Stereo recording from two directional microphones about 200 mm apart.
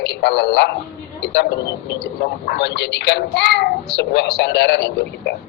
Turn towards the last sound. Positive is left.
turn(degrees=55)  # may be behind; listen again after turning